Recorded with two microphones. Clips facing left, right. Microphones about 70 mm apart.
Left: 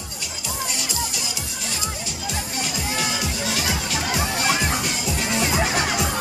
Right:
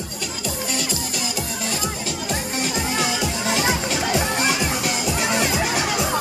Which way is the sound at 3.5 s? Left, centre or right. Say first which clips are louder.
Right 6 dB; right.